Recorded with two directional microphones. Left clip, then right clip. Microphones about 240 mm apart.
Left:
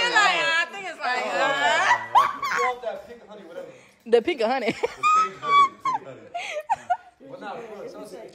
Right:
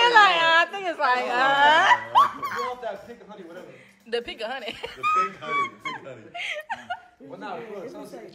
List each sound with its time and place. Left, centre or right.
0.0 s a sound: centre
2.1 s dog: left
4.1 s speech: left
6.3 s laughter: left